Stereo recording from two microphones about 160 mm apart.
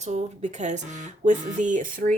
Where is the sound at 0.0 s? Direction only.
45° right (ahead or behind).